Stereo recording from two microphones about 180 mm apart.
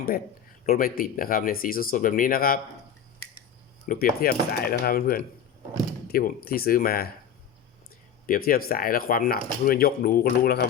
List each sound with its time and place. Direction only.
0.6 s speech: 55° left (ahead or behind)
3.8 s speech: 55° left (ahead or behind)
8.3 s speech: 55° left (ahead or behind)